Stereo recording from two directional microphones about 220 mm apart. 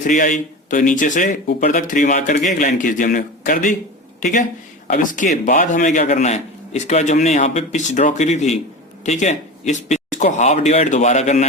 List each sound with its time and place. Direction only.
0.0 s speech: 35° left (ahead or behind)